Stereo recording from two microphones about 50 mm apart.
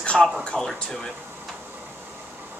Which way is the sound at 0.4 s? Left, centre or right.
Centre.